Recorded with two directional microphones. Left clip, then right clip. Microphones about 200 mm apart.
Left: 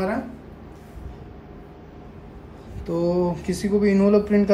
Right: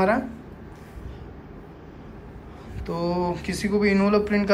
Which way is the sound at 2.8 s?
30° left (ahead or behind).